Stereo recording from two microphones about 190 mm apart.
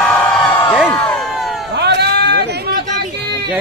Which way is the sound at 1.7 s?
60° right (ahead or behind).